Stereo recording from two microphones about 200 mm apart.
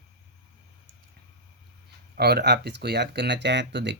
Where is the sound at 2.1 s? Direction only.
55° right (ahead or behind).